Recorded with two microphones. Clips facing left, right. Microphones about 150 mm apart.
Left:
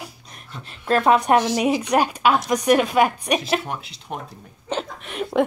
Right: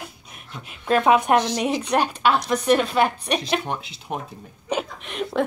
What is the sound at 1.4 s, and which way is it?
A woman's voice, 5° left (ahead or behind).